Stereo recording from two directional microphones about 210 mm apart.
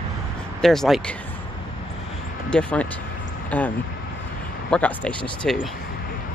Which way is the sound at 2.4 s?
5° left (ahead or behind).